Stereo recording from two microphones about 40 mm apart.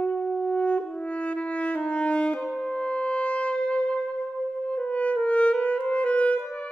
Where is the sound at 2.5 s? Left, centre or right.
Left.